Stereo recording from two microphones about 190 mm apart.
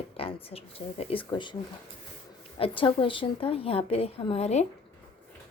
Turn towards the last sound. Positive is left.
turn(degrees=35)  # may be behind; listen again after turning